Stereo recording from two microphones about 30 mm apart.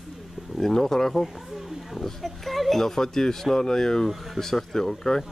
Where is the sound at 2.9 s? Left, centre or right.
Centre.